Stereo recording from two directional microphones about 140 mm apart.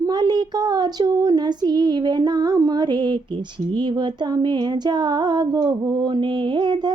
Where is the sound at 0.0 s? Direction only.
30° right (ahead or behind).